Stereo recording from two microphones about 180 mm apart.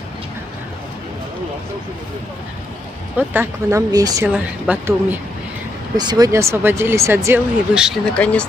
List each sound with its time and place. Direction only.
3.2 s speech: 15° right (ahead or behind)
4.3 s speech: 10° right (ahead or behind)
5.9 s speech: 20° right (ahead or behind)
7.7 s speech: 5° right (ahead or behind)
8.2 s speech: 5° left (ahead or behind)